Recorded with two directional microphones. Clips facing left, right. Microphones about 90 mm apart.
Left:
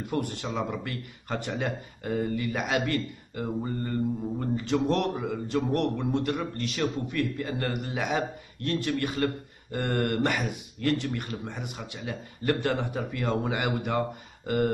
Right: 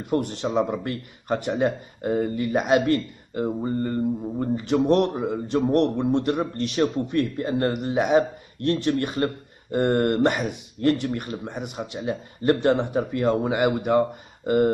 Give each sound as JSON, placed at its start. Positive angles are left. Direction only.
{"t": 0.2, "sound": "speech", "side_deg": -20}